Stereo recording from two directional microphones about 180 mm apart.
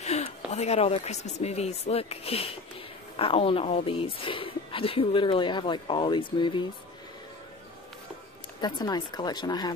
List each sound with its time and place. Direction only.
0.0 s a woman's voice: 35° left (ahead or behind)
8.5 s a woman's voice: 25° left (ahead or behind)